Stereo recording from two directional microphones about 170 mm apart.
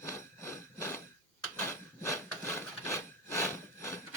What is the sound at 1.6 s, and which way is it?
Wood, 15° left (ahead or behind).